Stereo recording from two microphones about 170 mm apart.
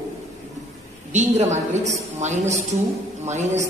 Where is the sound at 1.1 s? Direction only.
45° right (ahead or behind).